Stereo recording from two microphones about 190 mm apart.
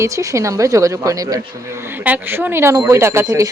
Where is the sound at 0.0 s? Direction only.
15° right (ahead or behind).